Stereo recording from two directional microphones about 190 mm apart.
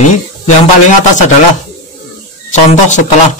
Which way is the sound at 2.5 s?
40° left (ahead or behind).